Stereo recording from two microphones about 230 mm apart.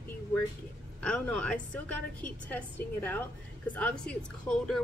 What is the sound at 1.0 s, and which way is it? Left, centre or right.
A woman's voice, centre.